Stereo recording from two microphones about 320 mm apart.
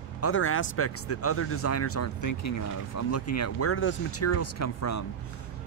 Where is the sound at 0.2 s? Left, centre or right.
Left.